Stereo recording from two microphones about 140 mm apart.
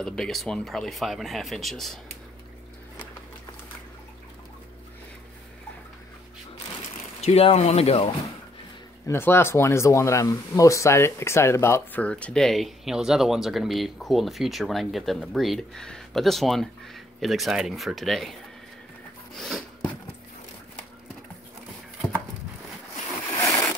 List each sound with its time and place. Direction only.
0.0 s speech: 5° left (ahead or behind)
7.2 s speech: 45° left (ahead or behind)
9.0 s speech: 20° left (ahead or behind); by 18.3 s centre (ahead or behind)
19.3 s a sound: centre (ahead or behind)